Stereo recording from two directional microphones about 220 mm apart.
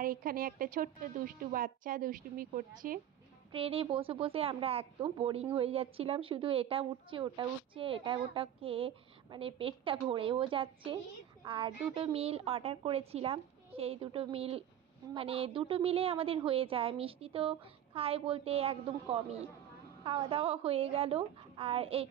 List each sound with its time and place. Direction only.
0.0 s a woman's voice: 40° right (ahead or behind)
3.5 s speech: 25° right (ahead or behind)